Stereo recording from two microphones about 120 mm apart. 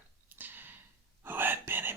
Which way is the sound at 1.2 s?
15° right (ahead or behind).